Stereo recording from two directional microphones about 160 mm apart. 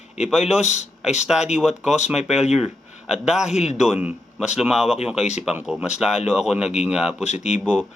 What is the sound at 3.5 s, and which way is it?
Speech, 45° left (ahead or behind).